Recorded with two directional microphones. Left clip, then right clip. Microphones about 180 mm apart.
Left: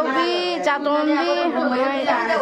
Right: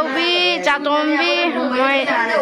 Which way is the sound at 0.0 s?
10° left (ahead or behind).